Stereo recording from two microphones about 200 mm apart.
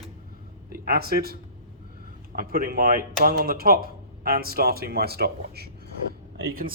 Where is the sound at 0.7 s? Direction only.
50° right (ahead or behind).